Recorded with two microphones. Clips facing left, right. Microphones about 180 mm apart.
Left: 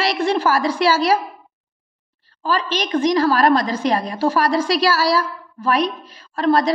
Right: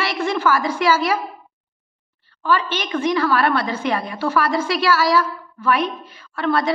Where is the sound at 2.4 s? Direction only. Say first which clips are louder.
Even; 35° left (ahead or behind).